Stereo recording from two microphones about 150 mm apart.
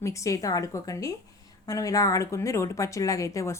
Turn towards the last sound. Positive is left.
turn(degrees=20)  # may be behind; listen again after turning